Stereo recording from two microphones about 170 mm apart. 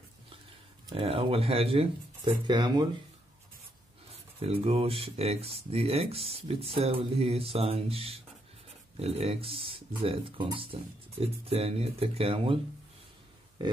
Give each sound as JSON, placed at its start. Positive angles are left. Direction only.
{"t": 0.8, "sound": "speech", "side_deg": -35}
{"t": 4.4, "sound": "speech", "side_deg": -35}